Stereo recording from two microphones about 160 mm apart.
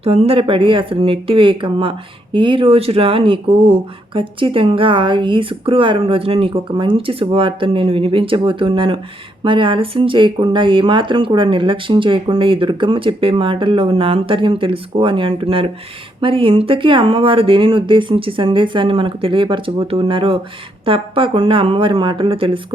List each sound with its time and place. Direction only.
0.0 s speech: 40° right (ahead or behind)